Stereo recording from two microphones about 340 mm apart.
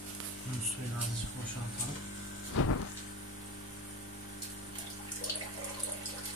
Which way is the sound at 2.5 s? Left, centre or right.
Left.